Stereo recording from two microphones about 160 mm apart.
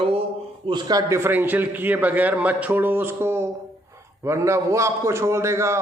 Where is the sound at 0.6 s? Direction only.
25° right (ahead or behind).